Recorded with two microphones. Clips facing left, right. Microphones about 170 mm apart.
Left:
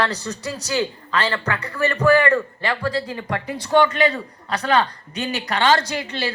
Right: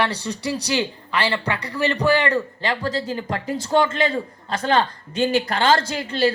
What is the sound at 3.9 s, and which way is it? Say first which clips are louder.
Speech: left 1 dB; 25° right (ahead or behind).